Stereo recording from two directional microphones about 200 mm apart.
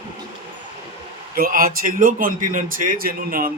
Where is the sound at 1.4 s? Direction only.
45° right (ahead or behind).